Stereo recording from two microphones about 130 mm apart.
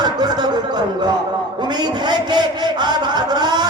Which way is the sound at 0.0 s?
35° right (ahead or behind).